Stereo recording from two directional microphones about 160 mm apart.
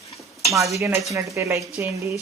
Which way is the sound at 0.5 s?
20° right (ahead or behind).